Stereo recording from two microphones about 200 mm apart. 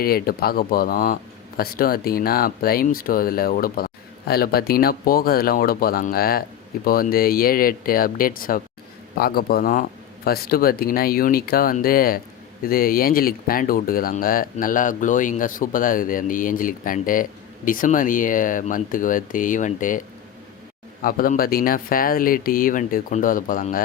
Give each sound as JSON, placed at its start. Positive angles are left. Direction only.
{"t": 0.0, "sound": "speech", "side_deg": 50}
{"t": 21.0, "sound": "speech", "side_deg": 45}